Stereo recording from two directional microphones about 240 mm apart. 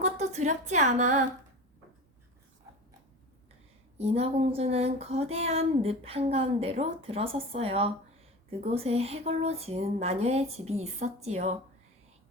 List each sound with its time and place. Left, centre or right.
0.0 s a woman's voice: right
3.9 s speech: right